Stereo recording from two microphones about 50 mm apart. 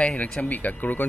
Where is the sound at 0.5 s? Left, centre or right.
Left.